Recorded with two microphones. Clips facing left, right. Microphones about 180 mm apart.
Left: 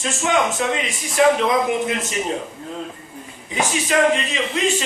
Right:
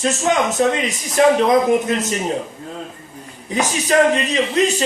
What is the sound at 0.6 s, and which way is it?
A man's voice, 40° right (ahead or behind).